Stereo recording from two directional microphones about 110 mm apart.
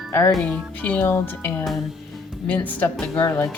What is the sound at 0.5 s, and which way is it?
Speech, 15° left (ahead or behind).